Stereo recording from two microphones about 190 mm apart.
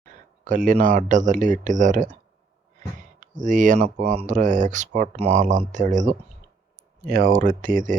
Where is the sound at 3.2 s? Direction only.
40° right (ahead or behind).